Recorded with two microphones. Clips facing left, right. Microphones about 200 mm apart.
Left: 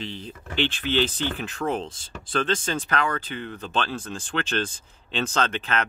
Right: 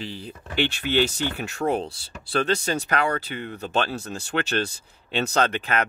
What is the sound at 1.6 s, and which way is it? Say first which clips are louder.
Speech: right 3 dB; 40° right (ahead or behind).